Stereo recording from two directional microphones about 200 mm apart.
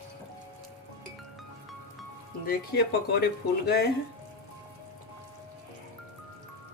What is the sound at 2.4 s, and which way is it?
Speech, 50° left (ahead or behind).